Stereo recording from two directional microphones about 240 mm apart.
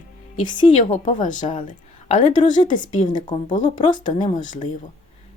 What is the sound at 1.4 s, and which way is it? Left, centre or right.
Speech, centre.